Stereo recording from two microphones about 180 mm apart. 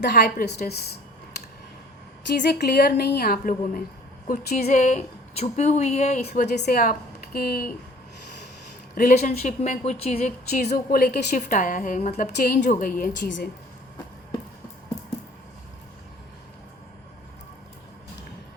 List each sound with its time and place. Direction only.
0.0 s a woman's voice: 65° left (ahead or behind)
2.3 s a woman's voice: 65° left (ahead or behind); by 4.6 s 50° left (ahead or behind)
4.6 s speech: 40° left (ahead or behind)
6.5 s speech: 60° left (ahead or behind)
9.0 s a woman's voice: 55° left (ahead or behind)
9.4 s a woman's voice: 35° left (ahead or behind)